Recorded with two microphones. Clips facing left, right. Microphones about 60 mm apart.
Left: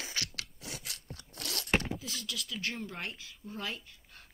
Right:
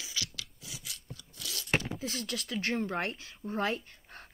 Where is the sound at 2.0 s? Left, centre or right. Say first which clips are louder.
Right 4 dB; right.